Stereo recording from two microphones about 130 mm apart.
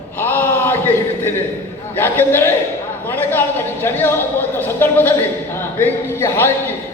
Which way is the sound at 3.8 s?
15° left (ahead or behind).